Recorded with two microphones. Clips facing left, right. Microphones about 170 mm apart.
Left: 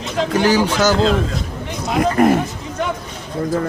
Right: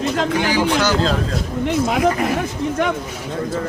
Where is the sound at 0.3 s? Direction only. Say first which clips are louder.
Left 5 dB; 45° left (ahead or behind).